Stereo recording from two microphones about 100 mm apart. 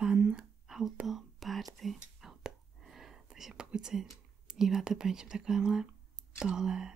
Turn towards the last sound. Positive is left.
turn(degrees=-5)  # may be behind; listen again after turning